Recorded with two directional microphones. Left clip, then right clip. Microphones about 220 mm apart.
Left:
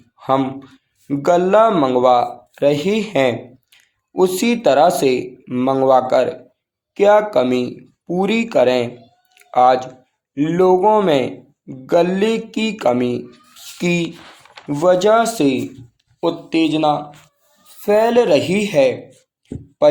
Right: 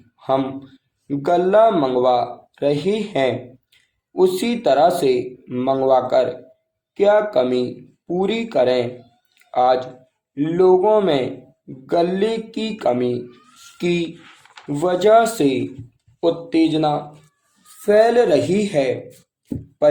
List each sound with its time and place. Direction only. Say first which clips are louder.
0.2 s speech: left 2 dB; 25° left (ahead or behind)
6.9 s mantra: left 3 dB; 30° left (ahead or behind)
9.3 s a sound: left 4 dB; 30° left (ahead or behind)
10.3 s mantra: left 1 dB; 25° left (ahead or behind)
13.7 s speech: left 1 dB; 25° left (ahead or behind)
16.2 s mantra: even; 25° left (ahead or behind)